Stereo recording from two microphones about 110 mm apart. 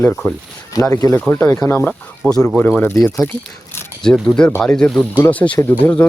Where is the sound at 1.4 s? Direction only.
30° left (ahead or behind).